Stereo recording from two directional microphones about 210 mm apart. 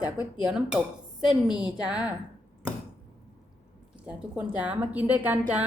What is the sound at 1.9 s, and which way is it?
Speech, 5° right (ahead or behind).